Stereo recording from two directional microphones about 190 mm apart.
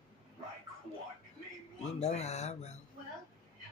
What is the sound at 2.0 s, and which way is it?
Speech, 35° left (ahead or behind).